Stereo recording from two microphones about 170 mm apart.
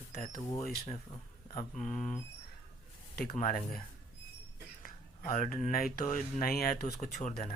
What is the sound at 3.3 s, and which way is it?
Speech, 55° left (ahead or behind).